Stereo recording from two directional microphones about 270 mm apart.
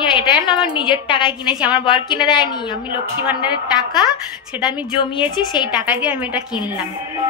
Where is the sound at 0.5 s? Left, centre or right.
Centre.